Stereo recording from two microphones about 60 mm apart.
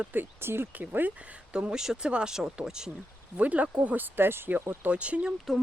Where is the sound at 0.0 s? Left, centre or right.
Right.